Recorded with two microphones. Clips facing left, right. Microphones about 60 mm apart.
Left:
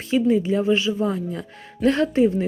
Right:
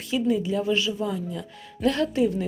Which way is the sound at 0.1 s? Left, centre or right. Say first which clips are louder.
Left 5 dB; left.